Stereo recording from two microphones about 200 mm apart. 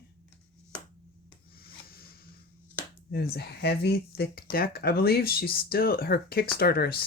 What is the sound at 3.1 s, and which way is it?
Speech, 50° left (ahead or behind).